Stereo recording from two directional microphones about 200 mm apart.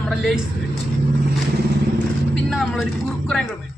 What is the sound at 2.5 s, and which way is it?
Speech, centre (ahead or behind).